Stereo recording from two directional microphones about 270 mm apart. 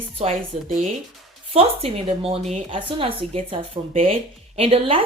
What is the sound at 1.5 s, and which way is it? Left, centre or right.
A woman's voice, right.